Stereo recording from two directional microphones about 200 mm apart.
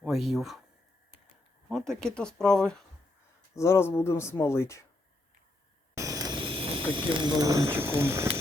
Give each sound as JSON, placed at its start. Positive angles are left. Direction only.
{"t": 0.0, "sound": "speech", "side_deg": 0}
{"t": 1.7, "sound": "speech", "side_deg": 0}
{"t": 3.5, "sound": "speech", "side_deg": 15}
{"t": 5.9, "sound": "vehicle", "side_deg": -15}
{"t": 6.9, "sound": "speech", "side_deg": -25}